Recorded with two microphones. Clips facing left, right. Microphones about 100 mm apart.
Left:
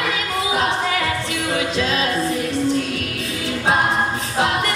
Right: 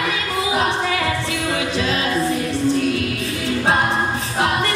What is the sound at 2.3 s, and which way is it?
Music, 20° left (ahead or behind).